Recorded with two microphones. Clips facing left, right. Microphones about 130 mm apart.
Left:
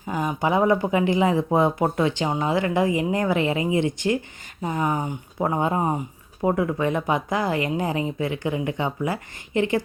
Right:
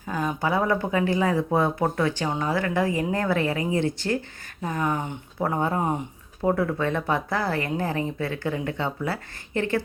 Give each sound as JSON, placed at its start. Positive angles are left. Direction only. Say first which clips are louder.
{"t": 0.0, "sound": "speech", "louder": "left 2 dB", "side_deg": 15}